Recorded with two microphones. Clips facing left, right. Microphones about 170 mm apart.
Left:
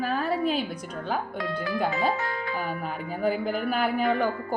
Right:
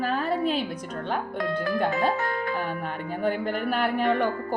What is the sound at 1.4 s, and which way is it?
Speech, 50° right (ahead or behind).